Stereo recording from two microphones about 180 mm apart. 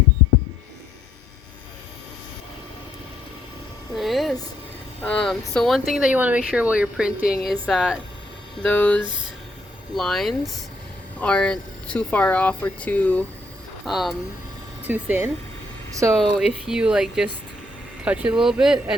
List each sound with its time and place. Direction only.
3.9 s a sound: centre (ahead or behind)
5.0 s a woman's voice: 5° left (ahead or behind)
7.2 s a woman's voice: 55° left (ahead or behind)
7.7 s a woman's voice: 5° right (ahead or behind)
8.6 s a woman's voice: 10° left (ahead or behind)